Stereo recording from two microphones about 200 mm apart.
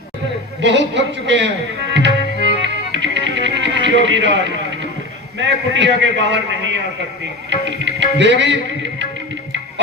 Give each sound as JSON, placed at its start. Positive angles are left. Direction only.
{"t": 0.6, "sound": "music", "side_deg": -60}